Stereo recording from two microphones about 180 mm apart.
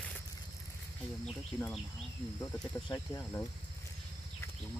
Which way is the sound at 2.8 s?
15° left (ahead or behind).